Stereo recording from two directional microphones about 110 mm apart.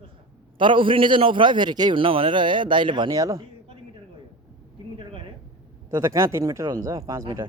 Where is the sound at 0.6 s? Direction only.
50° right (ahead or behind).